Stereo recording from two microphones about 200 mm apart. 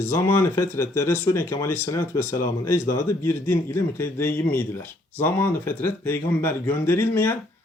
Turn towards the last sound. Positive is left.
turn(degrees=10)  # may be behind; listen again after turning